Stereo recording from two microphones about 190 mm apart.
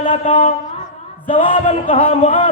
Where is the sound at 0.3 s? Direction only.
35° left (ahead or behind).